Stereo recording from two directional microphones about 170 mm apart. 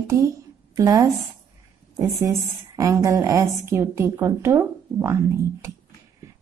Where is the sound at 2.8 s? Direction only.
20° right (ahead or behind).